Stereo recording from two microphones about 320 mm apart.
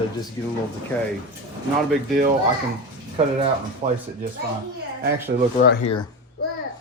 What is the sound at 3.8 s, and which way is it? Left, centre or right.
Speech, centre.